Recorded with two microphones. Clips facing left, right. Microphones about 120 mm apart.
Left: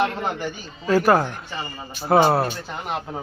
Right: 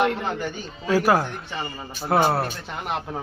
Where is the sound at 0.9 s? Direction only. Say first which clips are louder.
Left 2 dB; centre (ahead or behind).